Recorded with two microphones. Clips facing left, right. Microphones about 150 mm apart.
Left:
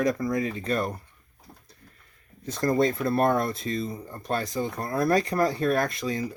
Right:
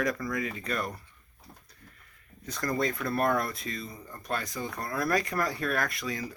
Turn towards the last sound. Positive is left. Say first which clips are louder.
# left 6 dB
turn(degrees=25)  # may be behind; listen again after turning